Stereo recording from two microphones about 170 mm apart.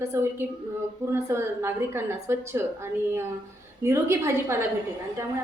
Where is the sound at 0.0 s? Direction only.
15° right (ahead or behind).